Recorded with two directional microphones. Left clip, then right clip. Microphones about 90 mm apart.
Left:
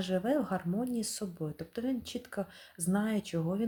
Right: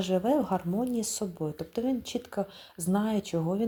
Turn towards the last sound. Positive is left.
turn(degrees=-20)  # may be behind; listen again after turning